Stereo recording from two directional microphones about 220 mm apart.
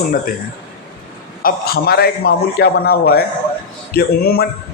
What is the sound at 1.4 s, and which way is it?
A man's voice, 45° left (ahead or behind).